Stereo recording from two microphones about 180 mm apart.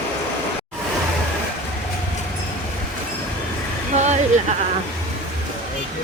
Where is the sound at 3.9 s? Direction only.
40° right (ahead or behind).